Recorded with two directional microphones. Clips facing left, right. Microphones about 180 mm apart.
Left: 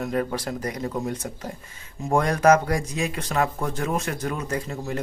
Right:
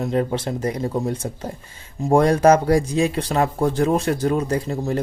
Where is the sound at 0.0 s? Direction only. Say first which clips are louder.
Right 4 dB; 25° right (ahead or behind).